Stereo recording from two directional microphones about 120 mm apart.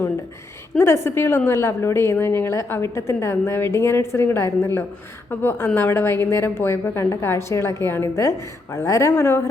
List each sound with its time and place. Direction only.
0.8 s a woman's voice: 25° left (ahead or behind)